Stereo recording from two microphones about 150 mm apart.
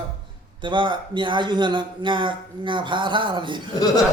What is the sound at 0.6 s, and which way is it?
A man's voice, 35° right (ahead or behind).